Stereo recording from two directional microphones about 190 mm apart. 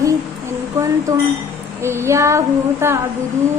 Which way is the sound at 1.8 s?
15° right (ahead or behind).